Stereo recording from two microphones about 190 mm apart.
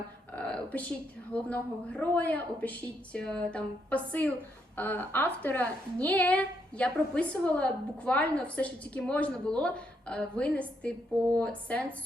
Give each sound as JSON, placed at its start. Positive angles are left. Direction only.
{"t": 0.3, "sound": "a woman's voice", "side_deg": 5}